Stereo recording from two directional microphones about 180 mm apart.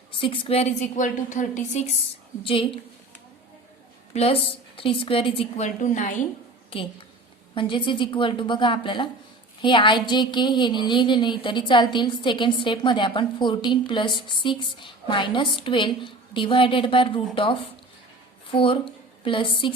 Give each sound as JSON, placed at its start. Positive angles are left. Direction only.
{"t": 0.2, "sound": "a woman's voice", "side_deg": 30}
{"t": 2.4, "sound": "a woman's voice", "side_deg": 30}
{"t": 4.1, "sound": "a woman's voice", "side_deg": 35}
{"t": 6.7, "sound": "a woman's voice", "side_deg": 30}